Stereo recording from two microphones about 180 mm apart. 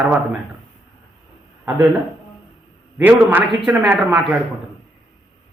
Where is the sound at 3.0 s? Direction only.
10° right (ahead or behind).